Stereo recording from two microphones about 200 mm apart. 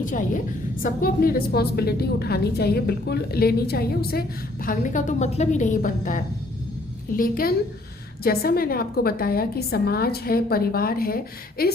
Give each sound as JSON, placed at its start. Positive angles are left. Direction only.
{"t": 0.0, "sound": "a woman's voice", "side_deg": 40}